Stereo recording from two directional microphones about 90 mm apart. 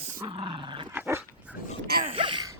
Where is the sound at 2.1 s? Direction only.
65° right (ahead or behind).